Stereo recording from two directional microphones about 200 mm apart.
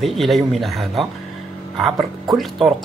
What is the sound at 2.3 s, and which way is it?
Speech, centre (ahead or behind).